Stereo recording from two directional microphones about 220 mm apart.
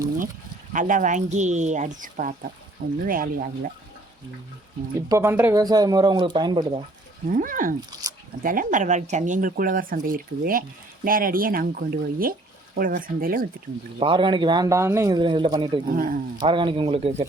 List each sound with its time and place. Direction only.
0.7 s speech: 35° right (ahead or behind)
4.9 s speech: 15° right (ahead or behind)
7.3 s speech: 35° right (ahead or behind)
7.8 s speech: 15° right (ahead or behind)
8.4 s speech: 35° right (ahead or behind)
14.0 s a man's voice: 20° right (ahead or behind)
15.9 s speech: 40° right (ahead or behind)
16.4 s a man's voice: 20° right (ahead or behind)